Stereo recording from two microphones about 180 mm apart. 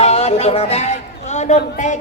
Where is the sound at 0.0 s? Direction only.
35° left (ahead or behind).